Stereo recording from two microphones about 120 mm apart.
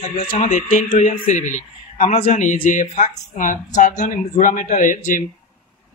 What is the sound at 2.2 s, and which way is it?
A man's voice, 80° left.